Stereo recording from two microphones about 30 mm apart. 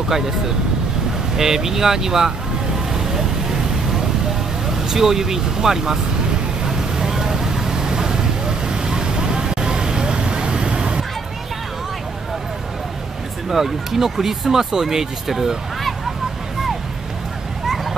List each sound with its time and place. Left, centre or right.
1.3 s speech: centre
4.8 s speech: centre
6.6 s vehicle: centre
13.5 s speech: centre